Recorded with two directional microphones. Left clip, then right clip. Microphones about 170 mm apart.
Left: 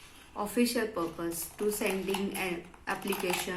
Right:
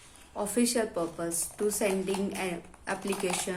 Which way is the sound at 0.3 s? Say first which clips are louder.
Right 2 dB; 80° right.